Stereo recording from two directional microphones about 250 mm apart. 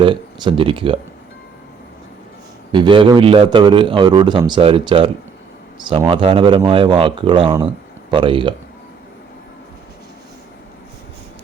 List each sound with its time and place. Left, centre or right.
0.0 s speech: centre
2.7 s a man's voice: centre